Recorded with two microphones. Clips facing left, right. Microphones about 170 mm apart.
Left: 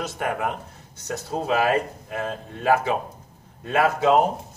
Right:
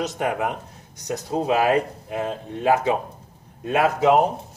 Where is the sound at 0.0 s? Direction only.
20° right (ahead or behind).